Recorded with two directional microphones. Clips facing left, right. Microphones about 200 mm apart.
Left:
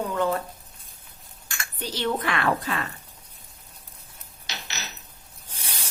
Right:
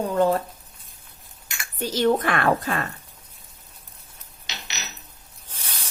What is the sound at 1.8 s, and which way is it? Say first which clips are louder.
Speech: right 7 dB; 45° right (ahead or behind).